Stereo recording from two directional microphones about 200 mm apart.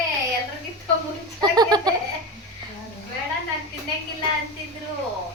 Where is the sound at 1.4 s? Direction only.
20° right (ahead or behind).